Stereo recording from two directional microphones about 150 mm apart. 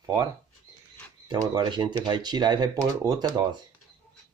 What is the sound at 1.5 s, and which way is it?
Speech, 30° right (ahead or behind).